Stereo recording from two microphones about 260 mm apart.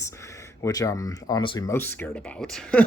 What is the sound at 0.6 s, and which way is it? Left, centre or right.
Speech, centre.